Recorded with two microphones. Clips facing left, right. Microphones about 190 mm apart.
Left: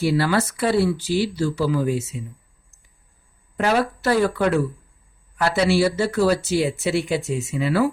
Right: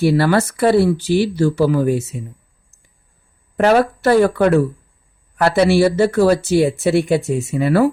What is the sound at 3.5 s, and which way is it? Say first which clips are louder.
Speech: right 7 dB; 55° right (ahead or behind).